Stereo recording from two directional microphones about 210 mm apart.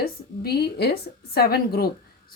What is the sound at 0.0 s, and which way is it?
A woman's voice, 50° left (ahead or behind).